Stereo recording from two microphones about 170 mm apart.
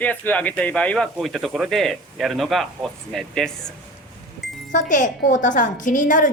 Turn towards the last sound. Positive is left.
turn(degrees=50)  # may be behind; listen again after turning